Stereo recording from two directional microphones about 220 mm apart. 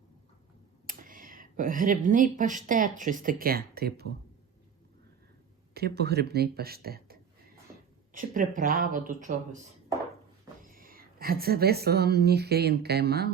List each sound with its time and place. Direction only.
0.9 s speech: 40° right (ahead or behind)
5.7 s speech: 45° right (ahead or behind)
10.6 s a woman's voice: 40° right (ahead or behind)